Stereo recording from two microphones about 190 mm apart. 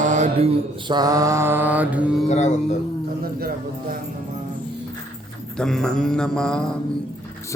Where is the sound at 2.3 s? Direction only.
35° left (ahead or behind).